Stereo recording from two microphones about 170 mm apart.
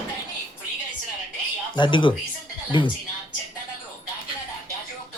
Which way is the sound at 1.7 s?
30° left (ahead or behind).